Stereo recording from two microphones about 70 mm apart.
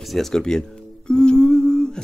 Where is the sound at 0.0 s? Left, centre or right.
Centre.